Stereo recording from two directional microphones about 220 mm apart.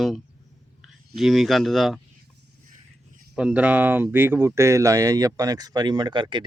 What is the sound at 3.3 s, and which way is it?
Speech, 5° right (ahead or behind).